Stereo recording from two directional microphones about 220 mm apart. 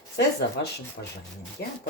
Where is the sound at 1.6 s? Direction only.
50° left (ahead or behind).